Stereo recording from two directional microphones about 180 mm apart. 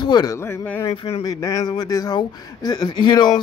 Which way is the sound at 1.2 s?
20° left (ahead or behind).